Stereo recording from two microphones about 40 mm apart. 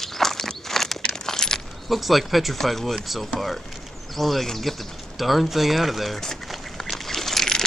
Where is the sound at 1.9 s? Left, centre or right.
Centre.